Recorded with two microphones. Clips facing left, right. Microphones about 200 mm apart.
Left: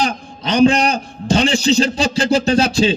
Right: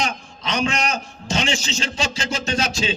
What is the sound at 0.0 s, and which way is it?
A man's voice, 35° left (ahead or behind).